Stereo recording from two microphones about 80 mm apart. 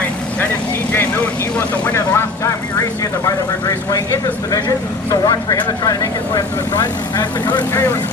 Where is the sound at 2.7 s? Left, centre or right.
Left.